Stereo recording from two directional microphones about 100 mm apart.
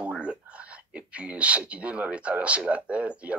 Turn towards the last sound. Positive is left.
turn(degrees=-10)  # may be behind; listen again after turning